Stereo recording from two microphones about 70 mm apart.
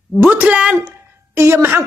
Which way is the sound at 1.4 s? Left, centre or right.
Right.